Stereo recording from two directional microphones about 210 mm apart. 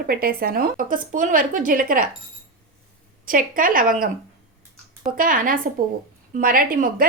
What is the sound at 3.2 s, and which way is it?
A woman's voice, 40° right (ahead or behind).